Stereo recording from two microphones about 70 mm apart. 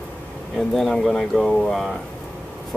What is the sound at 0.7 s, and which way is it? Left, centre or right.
Speech, centre.